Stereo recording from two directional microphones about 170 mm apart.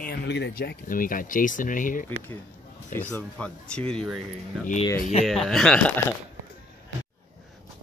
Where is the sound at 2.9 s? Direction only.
10° left (ahead or behind).